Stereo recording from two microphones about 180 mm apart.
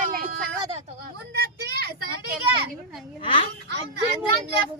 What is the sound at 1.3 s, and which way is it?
Children playing, 65° right (ahead or behind).